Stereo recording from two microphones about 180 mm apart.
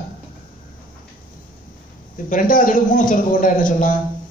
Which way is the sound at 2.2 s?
50° left (ahead or behind).